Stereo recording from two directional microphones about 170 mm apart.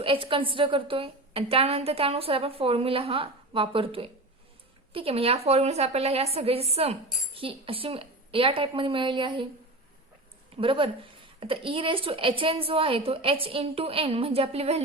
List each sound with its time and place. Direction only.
0.0 s a woman's voice: 30° right (ahead or behind)
10.6 s a woman's voice: 30° right (ahead or behind)